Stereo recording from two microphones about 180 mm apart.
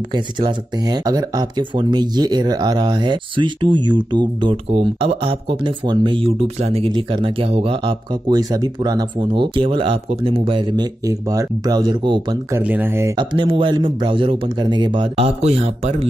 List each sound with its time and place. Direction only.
0.1 s speech: 25° right (ahead or behind)
12.5 s speech: 10° right (ahead or behind)
13.1 s speech: 25° right (ahead or behind)